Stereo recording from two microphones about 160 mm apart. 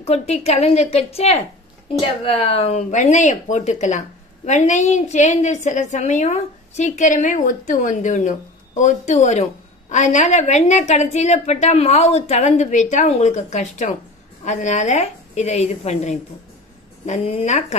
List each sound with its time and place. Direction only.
0.0 s a woman's voice: 40° left (ahead or behind)